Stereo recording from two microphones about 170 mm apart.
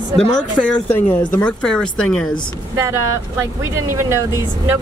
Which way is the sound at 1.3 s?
5° left (ahead or behind).